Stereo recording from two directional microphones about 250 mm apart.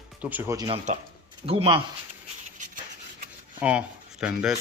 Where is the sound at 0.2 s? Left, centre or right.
Centre.